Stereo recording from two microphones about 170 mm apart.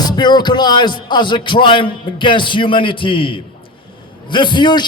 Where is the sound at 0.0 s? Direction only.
25° left (ahead or behind).